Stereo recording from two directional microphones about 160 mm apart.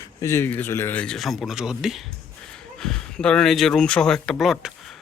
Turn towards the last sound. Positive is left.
turn(degrees=0)  # may be behind; listen again after turning